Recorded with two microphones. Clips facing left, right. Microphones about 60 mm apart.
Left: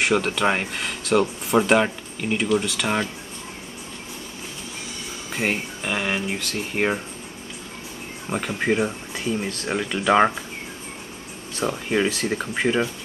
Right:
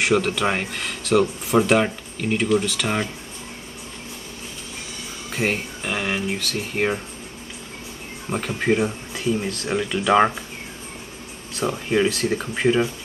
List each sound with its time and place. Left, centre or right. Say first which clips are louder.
0.0 s speech: even; centre
5.3 s speech: right 1 dB; centre
8.3 s speech: right 1 dB; centre
11.5 s speech: right 1 dB; centre